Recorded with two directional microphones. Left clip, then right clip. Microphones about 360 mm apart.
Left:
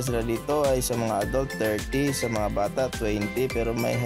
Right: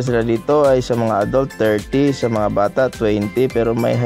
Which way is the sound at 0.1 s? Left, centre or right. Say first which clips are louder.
Right 11 dB; left.